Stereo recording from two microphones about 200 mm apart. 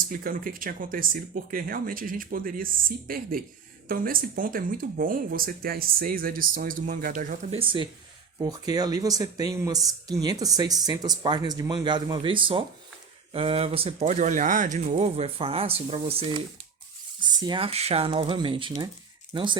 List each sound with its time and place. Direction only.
0.1 s speech: 45° right (ahead or behind)
7.6 s speech: 25° right (ahead or behind)